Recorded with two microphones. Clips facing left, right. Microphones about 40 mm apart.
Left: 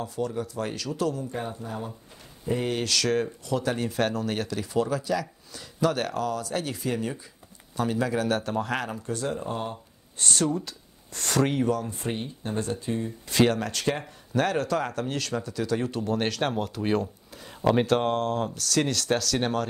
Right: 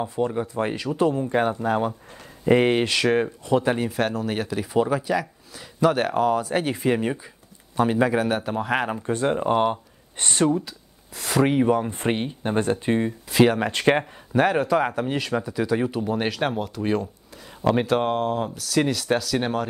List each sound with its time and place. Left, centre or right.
0.0 s speech: right
1.3 s speech: right
2.7 s speech: right
3.8 s speech: centre; by 8.3 s right
8.3 s speech: centre
8.8 s speech: right
10.1 s speech: right
11.1 s speech: centre
11.9 s speech: right
13.3 s speech: centre
13.6 s speech: right; by 19.7 s centre